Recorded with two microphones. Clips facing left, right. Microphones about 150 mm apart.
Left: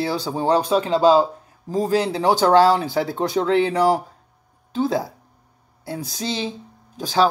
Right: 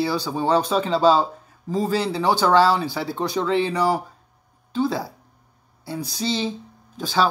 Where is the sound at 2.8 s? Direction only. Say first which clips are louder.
Left 3 dB; 50° left (ahead or behind).